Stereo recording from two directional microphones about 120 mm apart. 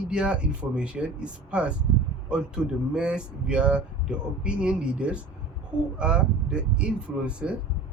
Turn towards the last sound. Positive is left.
turn(degrees=-10)  # may be behind; listen again after turning